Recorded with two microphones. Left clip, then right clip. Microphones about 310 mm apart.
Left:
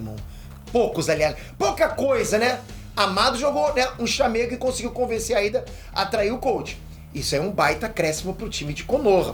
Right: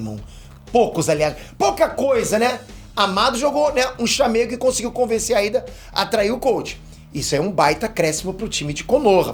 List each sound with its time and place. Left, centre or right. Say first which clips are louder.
0.7 s speech: right 4 dB; right